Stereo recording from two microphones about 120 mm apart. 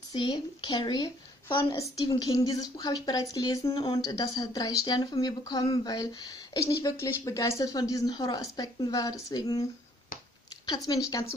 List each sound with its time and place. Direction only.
0.1 s speech: 40° left (ahead or behind)
1.8 s speech: 30° left (ahead or behind)
10.9 s speech: 30° left (ahead or behind)